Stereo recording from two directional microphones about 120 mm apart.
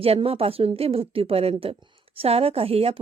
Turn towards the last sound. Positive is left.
turn(degrees=-55)  # may be behind; listen again after turning